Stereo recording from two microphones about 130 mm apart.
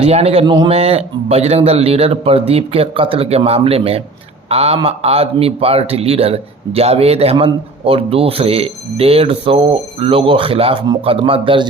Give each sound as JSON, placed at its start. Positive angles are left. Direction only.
{"t": 0.0, "sound": "speech", "side_deg": -55}
{"t": 0.4, "sound": "a man's voice", "side_deg": -35}
{"t": 0.7, "sound": "speech", "side_deg": -50}